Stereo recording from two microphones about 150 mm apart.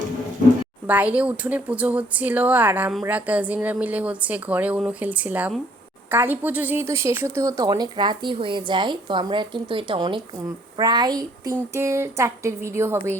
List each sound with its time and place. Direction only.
0.9 s a woman's voice: 10° right (ahead or behind)